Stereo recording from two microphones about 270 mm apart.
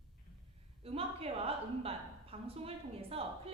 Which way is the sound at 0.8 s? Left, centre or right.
Right.